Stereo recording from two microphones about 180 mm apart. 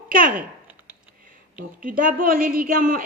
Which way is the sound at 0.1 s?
50° right (ahead or behind).